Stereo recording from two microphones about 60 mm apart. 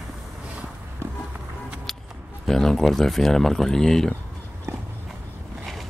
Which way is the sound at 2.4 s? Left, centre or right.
Centre.